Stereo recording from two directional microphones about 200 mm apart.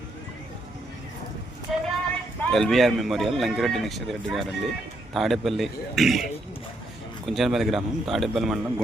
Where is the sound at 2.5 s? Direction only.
Centre (ahead or behind).